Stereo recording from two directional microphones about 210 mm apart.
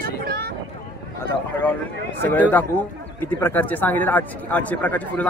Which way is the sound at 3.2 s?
10° left (ahead or behind).